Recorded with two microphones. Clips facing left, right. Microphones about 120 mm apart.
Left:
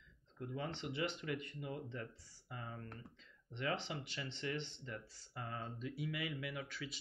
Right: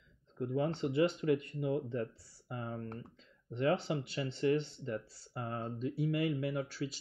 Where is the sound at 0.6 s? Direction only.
40° right (ahead or behind).